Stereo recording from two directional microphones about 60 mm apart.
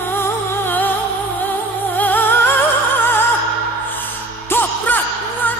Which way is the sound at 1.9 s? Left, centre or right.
Left.